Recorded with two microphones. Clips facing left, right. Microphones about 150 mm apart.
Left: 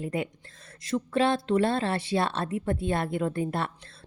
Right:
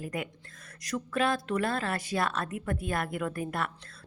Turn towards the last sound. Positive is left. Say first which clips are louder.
# left 4 dB
turn(degrees=25)  # may be behind; listen again after turning